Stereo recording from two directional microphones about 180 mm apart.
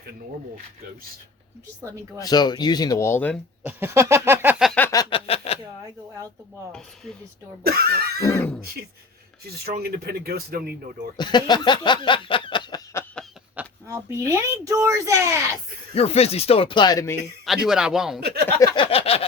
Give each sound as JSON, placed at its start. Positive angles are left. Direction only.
{"t": 2.1, "sound": "speech", "side_deg": 20}
{"t": 3.6, "sound": "speech", "side_deg": -10}
{"t": 4.6, "sound": "a sound", "side_deg": 5}
{"t": 4.9, "sound": "a sound", "side_deg": 25}
{"t": 7.6, "sound": "speech", "side_deg": -60}
{"t": 8.2, "sound": "speech", "side_deg": 15}
{"t": 9.6, "sound": "speech", "side_deg": -60}
{"t": 11.2, "sound": "a sound", "side_deg": 25}
{"t": 13.2, "sound": "a sound", "side_deg": 5}
{"t": 13.6, "sound": "speech", "side_deg": -15}
{"t": 16.0, "sound": "speech", "side_deg": 35}
{"t": 17.4, "sound": "a man's voice", "side_deg": 0}
{"t": 18.6, "sound": "speech", "side_deg": 30}